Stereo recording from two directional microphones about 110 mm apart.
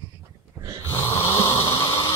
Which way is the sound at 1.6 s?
25° left (ahead or behind).